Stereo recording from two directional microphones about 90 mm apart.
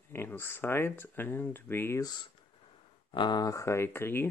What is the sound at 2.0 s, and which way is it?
Speech, 50° left (ahead or behind).